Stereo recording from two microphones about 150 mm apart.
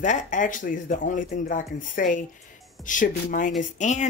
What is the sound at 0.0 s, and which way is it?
Speech, 55° left (ahead or behind).